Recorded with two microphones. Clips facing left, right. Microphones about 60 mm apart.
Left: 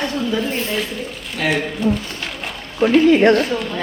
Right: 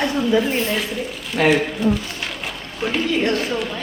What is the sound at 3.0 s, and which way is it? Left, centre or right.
Speech, left.